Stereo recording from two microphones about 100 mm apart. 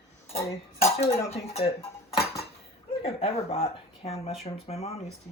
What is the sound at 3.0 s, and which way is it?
Speech, 75° left (ahead or behind).